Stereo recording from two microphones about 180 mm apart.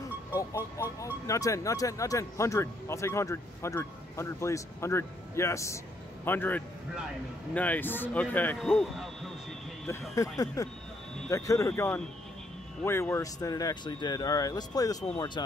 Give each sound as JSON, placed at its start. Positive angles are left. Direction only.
{"t": 0.3, "sound": "music", "side_deg": 15}
{"t": 1.2, "sound": "speech", "side_deg": 15}
{"t": 8.5, "sound": "speech", "side_deg": 0}
{"t": 10.1, "sound": "speech", "side_deg": 20}